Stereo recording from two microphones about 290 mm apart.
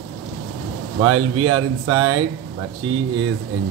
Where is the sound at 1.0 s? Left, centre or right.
Right.